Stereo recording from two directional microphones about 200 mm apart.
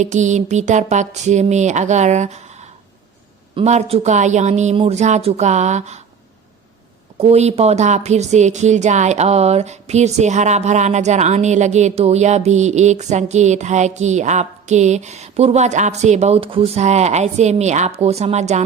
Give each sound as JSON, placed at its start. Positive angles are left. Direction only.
{"t": 0.0, "sound": "speech", "side_deg": -35}
{"t": 7.2, "sound": "speech", "side_deg": -30}